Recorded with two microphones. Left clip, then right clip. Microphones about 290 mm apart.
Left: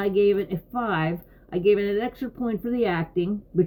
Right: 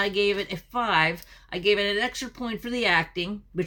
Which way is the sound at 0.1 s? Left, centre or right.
Centre.